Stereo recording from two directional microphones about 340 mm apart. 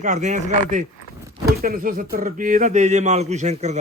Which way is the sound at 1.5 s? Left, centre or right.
Right.